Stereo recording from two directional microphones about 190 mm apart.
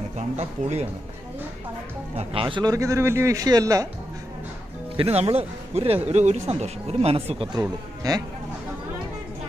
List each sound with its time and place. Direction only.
0.4 s speech: 35° right (ahead or behind)
2.1 s a man's voice: 25° right (ahead or behind)
4.9 s speech: 30° right (ahead or behind)
8.0 s speech: 20° right (ahead or behind)